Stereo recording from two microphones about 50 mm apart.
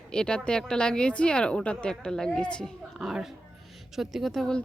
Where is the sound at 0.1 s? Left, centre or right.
Centre.